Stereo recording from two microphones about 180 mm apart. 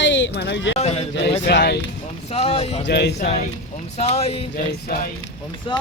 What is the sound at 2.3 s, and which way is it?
Speech, 35° left (ahead or behind).